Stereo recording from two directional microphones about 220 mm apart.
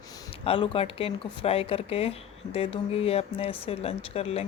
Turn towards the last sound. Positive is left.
turn(degrees=25)  # may be behind; listen again after turning